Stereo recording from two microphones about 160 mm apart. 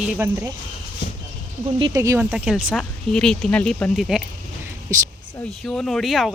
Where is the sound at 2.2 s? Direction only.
5° right (ahead or behind).